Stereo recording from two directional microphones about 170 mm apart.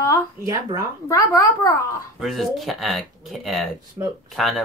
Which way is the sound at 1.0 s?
20° left (ahead or behind).